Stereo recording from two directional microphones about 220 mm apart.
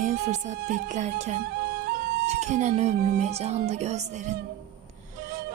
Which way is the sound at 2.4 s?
30° right (ahead or behind).